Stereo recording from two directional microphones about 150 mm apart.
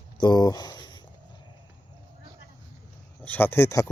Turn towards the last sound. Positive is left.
turn(degrees=15)  # may be behind; listen again after turning